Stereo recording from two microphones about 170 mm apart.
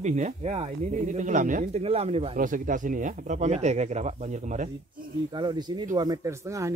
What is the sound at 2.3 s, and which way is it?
Speech, 50° right (ahead or behind).